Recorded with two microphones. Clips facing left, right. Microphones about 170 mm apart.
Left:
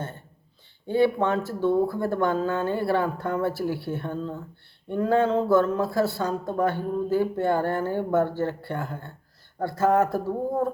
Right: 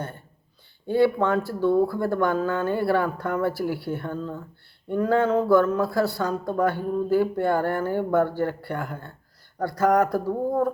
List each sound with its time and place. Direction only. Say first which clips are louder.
0.9 s speech: right 1 dB; 20° left (ahead or behind)